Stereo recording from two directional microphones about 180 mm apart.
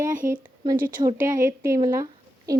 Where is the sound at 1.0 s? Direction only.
15° right (ahead or behind).